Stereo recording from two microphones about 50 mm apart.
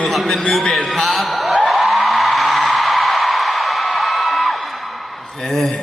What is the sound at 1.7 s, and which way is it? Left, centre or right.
Music, centre.